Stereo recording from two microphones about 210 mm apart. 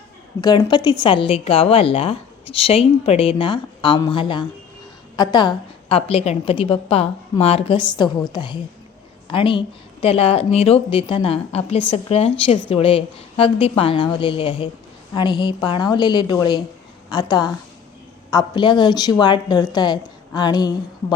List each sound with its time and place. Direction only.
0.4 s a woman's voice: 20° left (ahead or behind)